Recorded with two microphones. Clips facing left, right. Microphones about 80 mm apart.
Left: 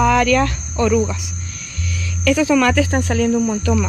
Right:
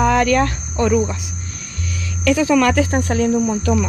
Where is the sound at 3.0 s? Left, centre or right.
Right.